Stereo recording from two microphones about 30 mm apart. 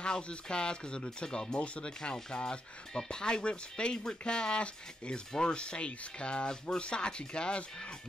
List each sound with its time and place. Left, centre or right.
0.0 s speech: left